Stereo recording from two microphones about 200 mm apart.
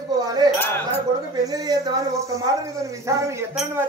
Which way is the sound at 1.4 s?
20° right (ahead or behind).